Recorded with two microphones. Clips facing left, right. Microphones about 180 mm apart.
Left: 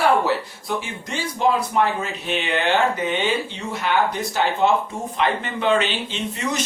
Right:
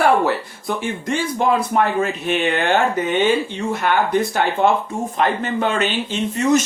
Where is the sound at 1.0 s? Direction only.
55° right (ahead or behind).